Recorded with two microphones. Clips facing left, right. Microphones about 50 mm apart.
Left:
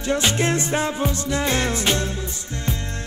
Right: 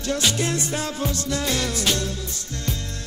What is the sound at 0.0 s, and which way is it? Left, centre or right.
Music, left.